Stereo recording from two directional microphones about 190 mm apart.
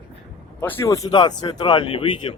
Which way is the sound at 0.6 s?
15° left (ahead or behind).